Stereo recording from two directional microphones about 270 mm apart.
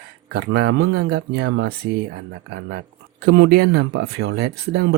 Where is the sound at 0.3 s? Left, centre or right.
Right.